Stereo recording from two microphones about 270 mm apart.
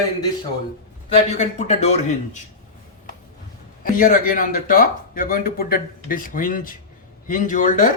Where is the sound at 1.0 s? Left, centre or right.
Left.